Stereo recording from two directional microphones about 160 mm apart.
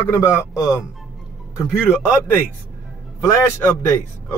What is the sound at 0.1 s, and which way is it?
Speech, 20° left (ahead or behind).